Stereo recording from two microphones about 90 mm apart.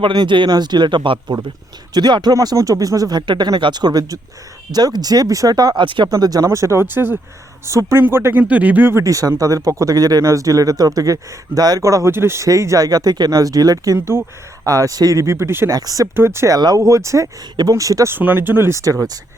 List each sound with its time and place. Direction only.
0.1 s speech: 60° right (ahead or behind)
1.9 s speech: 50° right (ahead or behind)
6.1 s speech: 45° right (ahead or behind); by 7.2 s 20° right (ahead or behind)
7.6 s speech: 35° right (ahead or behind)
9.0 s speech: 40° right (ahead or behind)
14.1 s speech: 25° right (ahead or behind)
14.7 s speech: 40° right (ahead or behind)
15.7 s speech: 40° right (ahead or behind)
16.1 s speech: 30° right (ahead or behind)
16.6 s speech: 45° right (ahead or behind)
18.1 s speech: 20° right (ahead or behind); by 19.2 s 40° right (ahead or behind)